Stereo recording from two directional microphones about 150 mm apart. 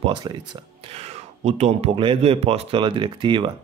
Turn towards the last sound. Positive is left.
turn(degrees=-30)  # may be behind; listen again after turning